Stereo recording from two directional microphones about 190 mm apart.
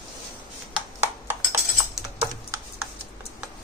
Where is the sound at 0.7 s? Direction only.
10° right (ahead or behind).